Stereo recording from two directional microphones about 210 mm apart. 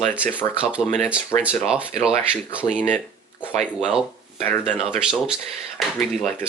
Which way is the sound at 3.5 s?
35° right (ahead or behind).